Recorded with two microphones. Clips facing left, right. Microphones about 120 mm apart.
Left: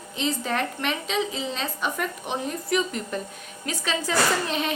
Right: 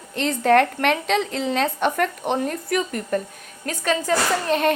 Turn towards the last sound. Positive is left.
turn(degrees=-50)  # may be behind; listen again after turning